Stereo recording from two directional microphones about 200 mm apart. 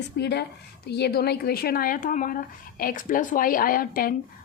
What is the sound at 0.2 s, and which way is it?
Speech, 60° left (ahead or behind).